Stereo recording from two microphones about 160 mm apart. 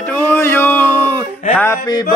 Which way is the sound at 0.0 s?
10° left (ahead or behind).